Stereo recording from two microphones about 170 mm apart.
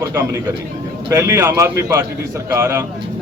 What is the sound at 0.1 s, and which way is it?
Speech, 15° right (ahead or behind).